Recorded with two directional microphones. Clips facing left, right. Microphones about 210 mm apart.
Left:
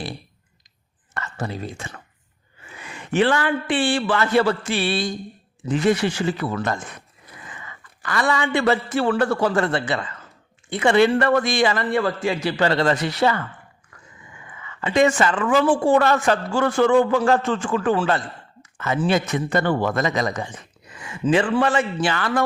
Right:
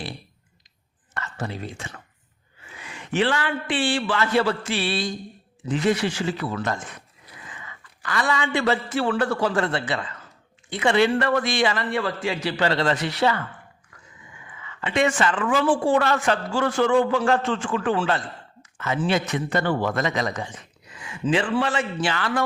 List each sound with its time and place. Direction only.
1.1 s a sound: 45° left (ahead or behind)
3.1 s a man's voice: 50° left (ahead or behind)
8.0 s a man's voice: 50° left (ahead or behind)
14.8 s a man's voice: 40° left (ahead or behind)